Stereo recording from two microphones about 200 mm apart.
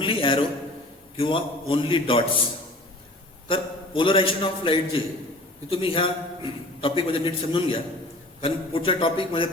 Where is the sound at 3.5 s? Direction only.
25° left (ahead or behind).